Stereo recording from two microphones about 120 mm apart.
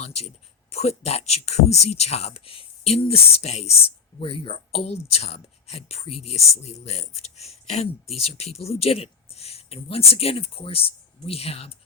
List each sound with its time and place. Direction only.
0.0 s speech: 60° left (ahead or behind)